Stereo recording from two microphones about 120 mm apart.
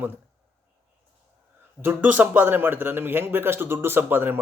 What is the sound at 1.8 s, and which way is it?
A man's voice, 15° right (ahead or behind).